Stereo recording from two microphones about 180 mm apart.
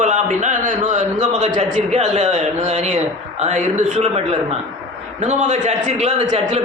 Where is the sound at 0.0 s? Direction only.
45° right (ahead or behind).